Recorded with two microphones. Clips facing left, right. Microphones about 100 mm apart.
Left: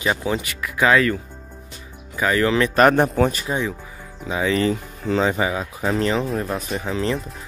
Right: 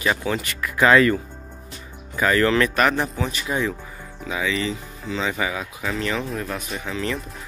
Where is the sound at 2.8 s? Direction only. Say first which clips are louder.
Left 6 dB; 50° left (ahead or behind).